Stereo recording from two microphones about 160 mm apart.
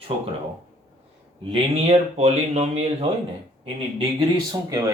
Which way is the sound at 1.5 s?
40° right (ahead or behind).